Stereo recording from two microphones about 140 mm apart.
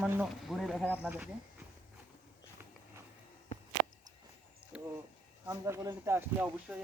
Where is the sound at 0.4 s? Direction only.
Centre (ahead or behind).